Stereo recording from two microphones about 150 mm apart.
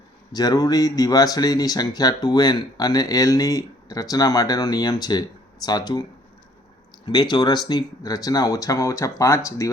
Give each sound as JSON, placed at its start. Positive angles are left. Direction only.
{"t": 0.3, "sound": "speech", "side_deg": 25}